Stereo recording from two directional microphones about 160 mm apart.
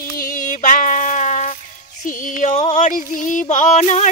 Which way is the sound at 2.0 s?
55° left (ahead or behind).